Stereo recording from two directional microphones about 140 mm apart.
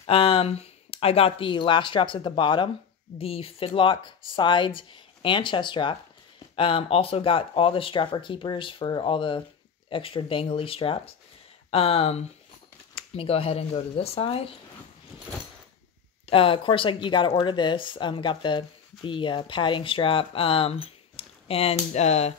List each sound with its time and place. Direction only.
0.0 s speech: 40° left (ahead or behind)
16.3 s speech: 40° left (ahead or behind)